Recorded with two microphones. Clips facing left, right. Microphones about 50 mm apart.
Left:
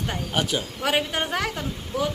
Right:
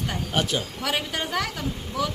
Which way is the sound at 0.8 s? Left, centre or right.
Left.